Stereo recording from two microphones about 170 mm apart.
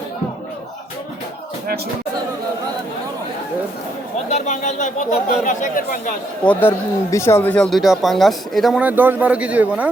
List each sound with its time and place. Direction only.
4.3 s speech: 40° left (ahead or behind)
6.4 s speech: 10° left (ahead or behind); by 9.9 s 10° right (ahead or behind)